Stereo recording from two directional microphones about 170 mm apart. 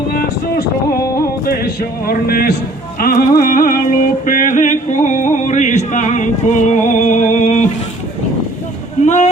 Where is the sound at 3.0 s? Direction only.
60° left (ahead or behind).